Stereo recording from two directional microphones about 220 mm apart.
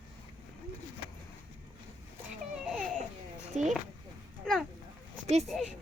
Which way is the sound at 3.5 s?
30° right (ahead or behind).